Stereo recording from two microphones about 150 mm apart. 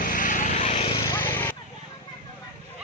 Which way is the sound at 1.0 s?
20° left (ahead or behind).